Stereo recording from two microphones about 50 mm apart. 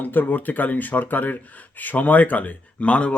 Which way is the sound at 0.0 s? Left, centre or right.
Left.